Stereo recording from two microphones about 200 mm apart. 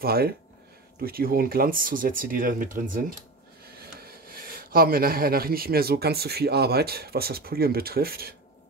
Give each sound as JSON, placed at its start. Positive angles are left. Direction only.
{"t": 0.0, "sound": "speech", "side_deg": -50}